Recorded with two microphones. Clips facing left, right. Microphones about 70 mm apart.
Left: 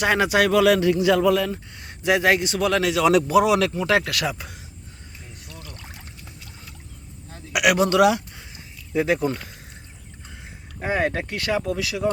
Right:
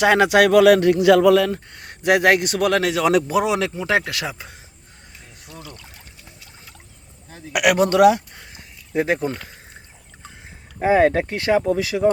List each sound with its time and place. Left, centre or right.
0.0 s a man's voice: right
7.5 s speech: right
8.5 s a sound: right
10.8 s speech: right